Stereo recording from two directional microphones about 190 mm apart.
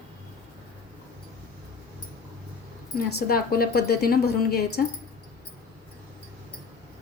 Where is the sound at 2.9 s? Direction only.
50° left (ahead or behind).